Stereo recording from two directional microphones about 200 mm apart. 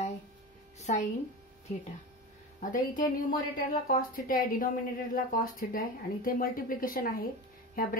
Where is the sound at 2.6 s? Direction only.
40° left (ahead or behind).